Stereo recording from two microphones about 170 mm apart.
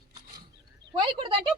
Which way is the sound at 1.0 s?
30° right (ahead or behind).